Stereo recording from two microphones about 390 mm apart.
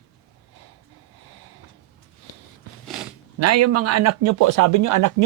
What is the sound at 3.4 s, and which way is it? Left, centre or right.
Speech, right.